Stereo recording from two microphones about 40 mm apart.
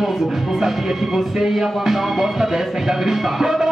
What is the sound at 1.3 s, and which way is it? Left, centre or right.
Speech, centre.